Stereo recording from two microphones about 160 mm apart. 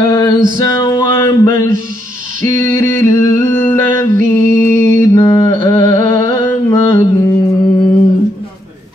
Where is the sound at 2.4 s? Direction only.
15° left (ahead or behind).